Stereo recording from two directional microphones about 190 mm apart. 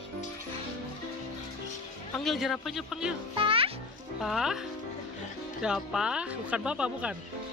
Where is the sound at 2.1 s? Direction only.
Centre (ahead or behind).